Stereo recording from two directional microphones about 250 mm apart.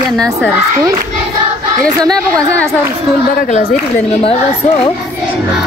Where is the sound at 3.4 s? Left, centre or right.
Left.